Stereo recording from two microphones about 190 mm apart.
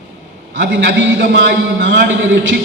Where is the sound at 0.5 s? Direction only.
70° right (ahead or behind).